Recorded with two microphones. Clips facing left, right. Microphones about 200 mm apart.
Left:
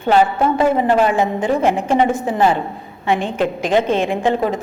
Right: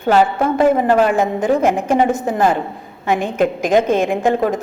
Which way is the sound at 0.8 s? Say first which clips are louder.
Right 1 dB; 45° right (ahead or behind).